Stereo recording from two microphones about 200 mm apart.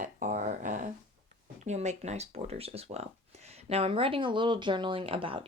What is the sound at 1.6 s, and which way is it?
Speech, 35° right (ahead or behind).